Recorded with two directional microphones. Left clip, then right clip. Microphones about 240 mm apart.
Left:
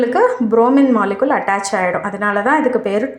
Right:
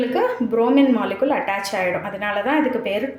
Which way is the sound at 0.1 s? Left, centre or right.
Centre.